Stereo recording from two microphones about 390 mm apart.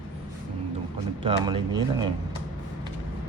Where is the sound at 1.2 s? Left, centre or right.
Centre.